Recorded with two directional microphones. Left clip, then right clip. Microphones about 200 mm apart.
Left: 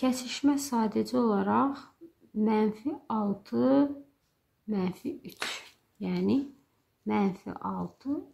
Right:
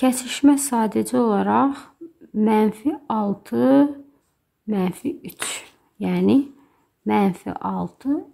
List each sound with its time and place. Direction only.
0.0 s speech: 30° right (ahead or behind)